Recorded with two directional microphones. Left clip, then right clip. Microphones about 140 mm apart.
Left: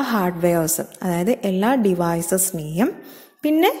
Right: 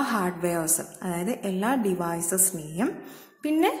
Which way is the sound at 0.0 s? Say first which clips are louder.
Left 6 dB; 40° left (ahead or behind).